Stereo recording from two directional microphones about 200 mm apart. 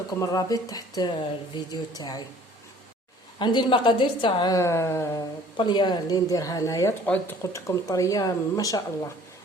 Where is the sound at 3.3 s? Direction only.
25° left (ahead or behind).